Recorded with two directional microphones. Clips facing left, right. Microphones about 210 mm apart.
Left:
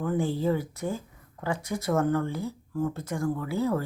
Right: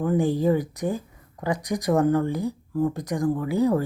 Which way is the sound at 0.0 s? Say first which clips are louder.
Right 5 dB; 15° right (ahead or behind).